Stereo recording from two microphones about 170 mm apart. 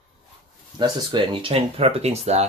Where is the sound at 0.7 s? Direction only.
25° right (ahead or behind).